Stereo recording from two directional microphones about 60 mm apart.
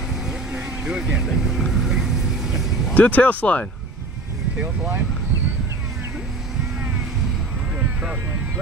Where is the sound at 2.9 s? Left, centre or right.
Left.